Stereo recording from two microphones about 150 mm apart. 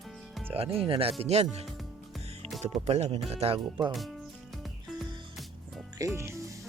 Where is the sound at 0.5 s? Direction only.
40° right (ahead or behind).